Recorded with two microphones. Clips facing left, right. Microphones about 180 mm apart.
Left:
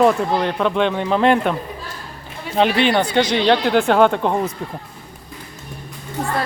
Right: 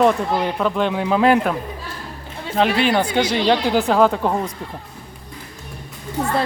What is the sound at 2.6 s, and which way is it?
Speech, centre (ahead or behind).